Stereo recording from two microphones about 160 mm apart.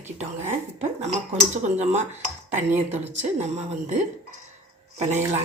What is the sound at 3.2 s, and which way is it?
Speech, 45° right (ahead or behind).